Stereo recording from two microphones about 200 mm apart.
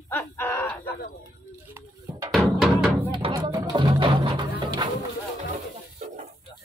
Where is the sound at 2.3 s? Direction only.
Centre (ahead or behind).